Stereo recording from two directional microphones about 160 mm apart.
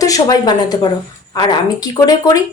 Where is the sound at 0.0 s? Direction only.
20° left (ahead or behind).